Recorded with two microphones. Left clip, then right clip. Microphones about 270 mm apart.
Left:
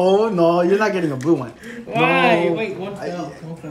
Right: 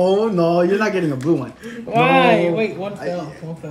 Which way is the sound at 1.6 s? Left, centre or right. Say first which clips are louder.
Right 2 dB; centre.